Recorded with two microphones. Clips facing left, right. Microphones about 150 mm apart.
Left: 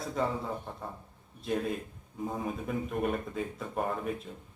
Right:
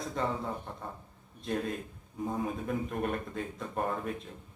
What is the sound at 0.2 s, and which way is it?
Speech, 5° left (ahead or behind).